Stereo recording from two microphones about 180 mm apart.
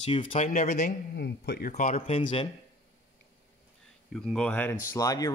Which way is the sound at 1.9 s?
30° left (ahead or behind).